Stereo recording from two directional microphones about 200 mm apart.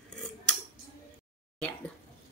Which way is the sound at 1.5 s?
5° left (ahead or behind).